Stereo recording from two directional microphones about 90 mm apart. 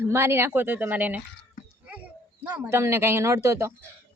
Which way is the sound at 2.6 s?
30° right (ahead or behind).